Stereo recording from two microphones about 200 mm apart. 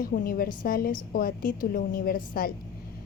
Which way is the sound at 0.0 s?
45° left (ahead or behind).